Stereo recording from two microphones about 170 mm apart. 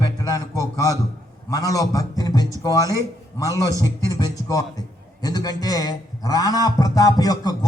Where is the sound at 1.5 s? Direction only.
20° left (ahead or behind).